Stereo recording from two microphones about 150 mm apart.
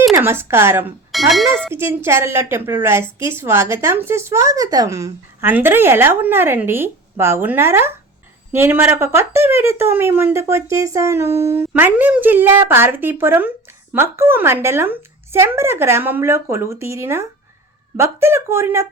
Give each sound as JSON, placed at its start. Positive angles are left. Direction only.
{"t": 0.1, "sound": "speech", "side_deg": -15}
{"t": 1.1, "sound": "speech", "side_deg": 0}
{"t": 1.7, "sound": "speech", "side_deg": -15}